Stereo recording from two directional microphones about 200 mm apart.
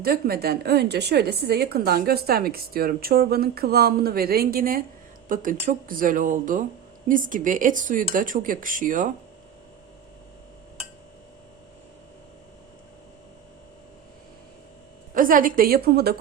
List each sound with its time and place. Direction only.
0.0 s a woman's voice: 50° right (ahead or behind)
15.1 s a woman's voice: 45° right (ahead or behind)